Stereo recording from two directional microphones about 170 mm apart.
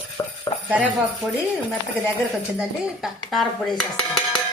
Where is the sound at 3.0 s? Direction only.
Centre (ahead or behind).